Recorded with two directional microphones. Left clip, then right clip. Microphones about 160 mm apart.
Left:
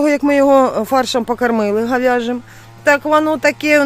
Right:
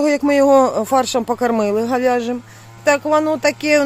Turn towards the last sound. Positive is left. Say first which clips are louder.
# left 2 dB
turn(degrees=15)  # may be behind; listen again after turning